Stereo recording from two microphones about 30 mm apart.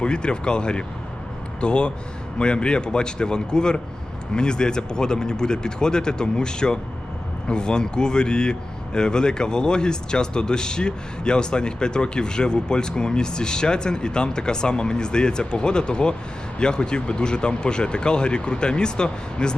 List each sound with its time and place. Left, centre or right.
0.0 s speech: left